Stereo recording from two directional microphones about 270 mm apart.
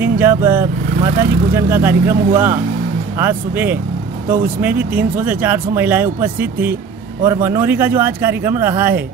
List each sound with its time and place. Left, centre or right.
0.0 s speech: centre